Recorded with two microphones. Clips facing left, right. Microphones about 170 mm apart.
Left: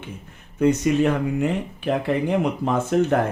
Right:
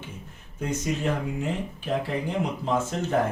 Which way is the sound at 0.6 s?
70° left (ahead or behind).